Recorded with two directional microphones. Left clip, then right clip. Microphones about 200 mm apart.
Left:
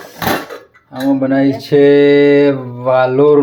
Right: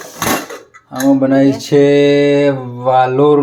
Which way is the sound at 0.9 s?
10° right (ahead or behind).